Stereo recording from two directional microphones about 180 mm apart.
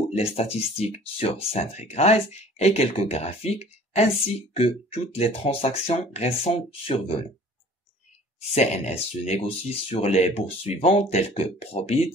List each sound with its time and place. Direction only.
0.1 s speech: 35° left (ahead or behind)
8.5 s speech: 35° left (ahead or behind)